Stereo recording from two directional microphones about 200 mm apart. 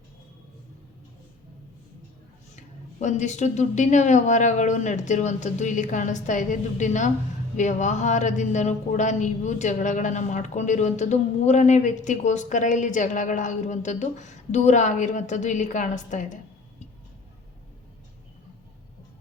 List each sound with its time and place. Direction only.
2.6 s speech: 35° left (ahead or behind)